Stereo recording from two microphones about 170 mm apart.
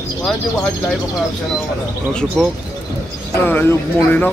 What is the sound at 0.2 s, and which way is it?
Speech, 5° left (ahead or behind).